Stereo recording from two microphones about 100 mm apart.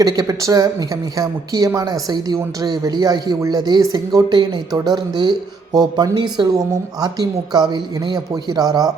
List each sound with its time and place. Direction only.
0.0 s speech: 40° right (ahead or behind)